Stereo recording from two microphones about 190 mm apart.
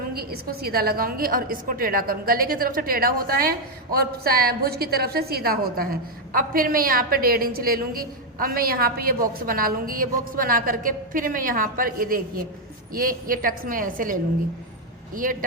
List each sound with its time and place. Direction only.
0.1 s a woman's voice: 55° right (ahead or behind)